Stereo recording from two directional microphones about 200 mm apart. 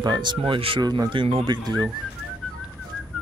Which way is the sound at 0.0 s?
20° right (ahead or behind).